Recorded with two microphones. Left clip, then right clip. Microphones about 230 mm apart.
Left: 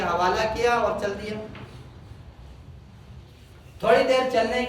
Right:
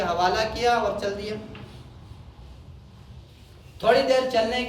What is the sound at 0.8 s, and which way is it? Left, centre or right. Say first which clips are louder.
Speech: left 1 dB; left.